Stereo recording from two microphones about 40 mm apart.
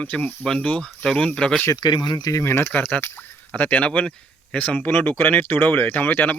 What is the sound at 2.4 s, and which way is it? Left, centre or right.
Speech, left.